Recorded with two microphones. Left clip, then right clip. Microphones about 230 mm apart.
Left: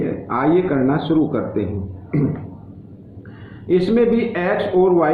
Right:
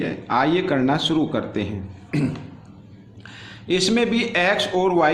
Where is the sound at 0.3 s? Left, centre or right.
Right.